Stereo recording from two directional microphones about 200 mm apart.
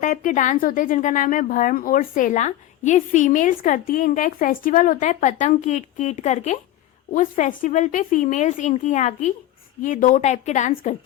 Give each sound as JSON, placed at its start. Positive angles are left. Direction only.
{"t": 0.0, "sound": "speech", "side_deg": 40}